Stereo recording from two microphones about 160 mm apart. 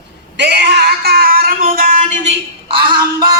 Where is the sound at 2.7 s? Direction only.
30° right (ahead or behind).